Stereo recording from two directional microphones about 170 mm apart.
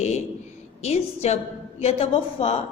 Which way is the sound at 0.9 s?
40° left (ahead or behind).